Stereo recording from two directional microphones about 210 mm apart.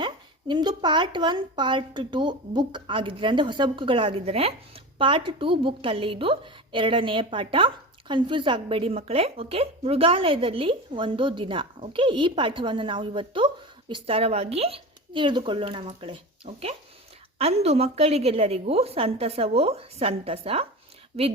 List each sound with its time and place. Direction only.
0.0 s a woman's voice: 20° right (ahead or behind)